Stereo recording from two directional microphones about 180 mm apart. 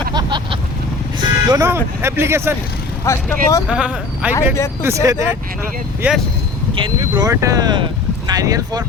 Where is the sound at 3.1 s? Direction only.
15° left (ahead or behind).